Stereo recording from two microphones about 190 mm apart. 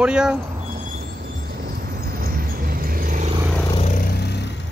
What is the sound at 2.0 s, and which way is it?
Vehicle, 55° right (ahead or behind).